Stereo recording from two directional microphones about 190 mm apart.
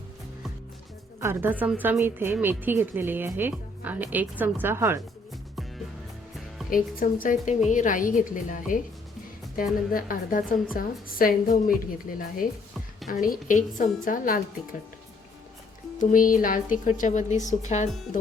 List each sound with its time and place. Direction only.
1.2 s a woman's voice: 10° right (ahead or behind)
6.7 s a woman's voice: 45° left (ahead or behind)
9.9 s a woman's voice: 45° left (ahead or behind)
13.2 s a woman's voice: 45° left (ahead or behind)
16.0 s a woman's voice: 45° left (ahead or behind)